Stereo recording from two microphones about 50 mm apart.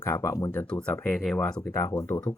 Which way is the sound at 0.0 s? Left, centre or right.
Left.